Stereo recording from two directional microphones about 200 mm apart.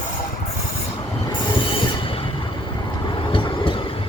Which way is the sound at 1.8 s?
25° left (ahead or behind).